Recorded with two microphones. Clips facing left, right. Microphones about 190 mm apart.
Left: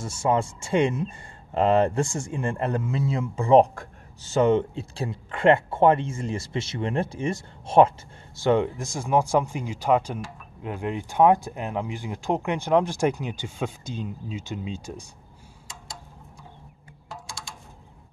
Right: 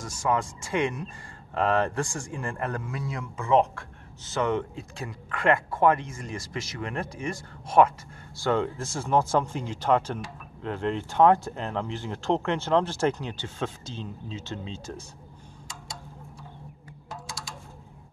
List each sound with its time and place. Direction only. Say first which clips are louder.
0.0 s speech: left 3 dB; 25° left (ahead or behind)
17.1 s music: even; centre (ahead or behind)